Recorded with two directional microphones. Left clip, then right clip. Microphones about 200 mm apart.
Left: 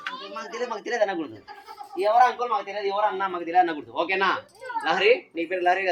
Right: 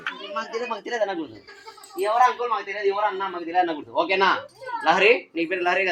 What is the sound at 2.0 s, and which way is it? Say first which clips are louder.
A man's voice: even; centre (ahead or behind).